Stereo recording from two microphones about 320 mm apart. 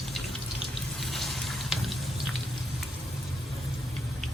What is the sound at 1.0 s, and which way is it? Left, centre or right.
Water, centre.